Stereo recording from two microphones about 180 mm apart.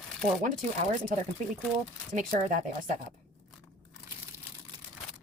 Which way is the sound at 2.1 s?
45° right (ahead or behind).